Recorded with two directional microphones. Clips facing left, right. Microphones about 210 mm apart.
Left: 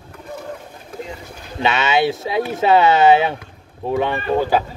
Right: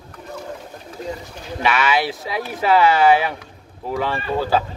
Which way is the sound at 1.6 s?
25° left (ahead or behind).